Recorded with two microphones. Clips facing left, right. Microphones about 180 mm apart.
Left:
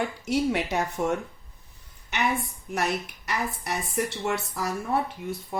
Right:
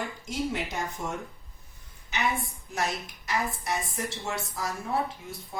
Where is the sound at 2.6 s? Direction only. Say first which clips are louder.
Left 4 dB; 65° left (ahead or behind).